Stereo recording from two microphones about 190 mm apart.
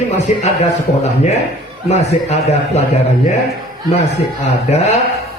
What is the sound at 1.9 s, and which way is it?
A man's voice, 35° left (ahead or behind).